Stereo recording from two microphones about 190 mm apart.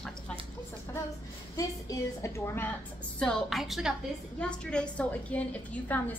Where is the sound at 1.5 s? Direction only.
15° left (ahead or behind).